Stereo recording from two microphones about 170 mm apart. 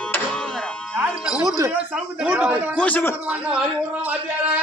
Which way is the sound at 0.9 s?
5° right (ahead or behind).